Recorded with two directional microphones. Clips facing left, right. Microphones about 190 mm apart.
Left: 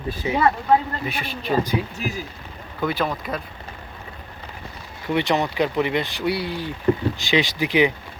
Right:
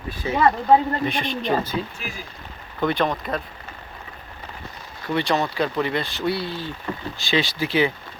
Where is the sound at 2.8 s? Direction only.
5° left (ahead or behind).